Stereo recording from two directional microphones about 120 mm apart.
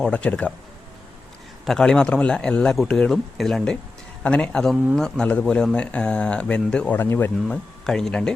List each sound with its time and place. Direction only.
0.0 s speech: 10° left (ahead or behind)
1.6 s speech: 5° left (ahead or behind)
7.4 s speech: 5° left (ahead or behind)